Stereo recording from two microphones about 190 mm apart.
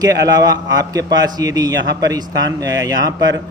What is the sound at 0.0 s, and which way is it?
Speech, 20° right (ahead or behind).